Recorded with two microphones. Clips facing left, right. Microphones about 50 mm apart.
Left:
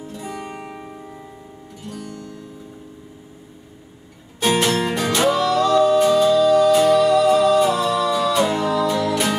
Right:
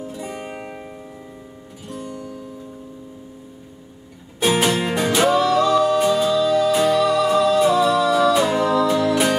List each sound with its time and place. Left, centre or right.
0.0 s music: centre
0.3 s music: centre
0.6 s music: centre
2.0 s guitar: right
4.4 s music: centre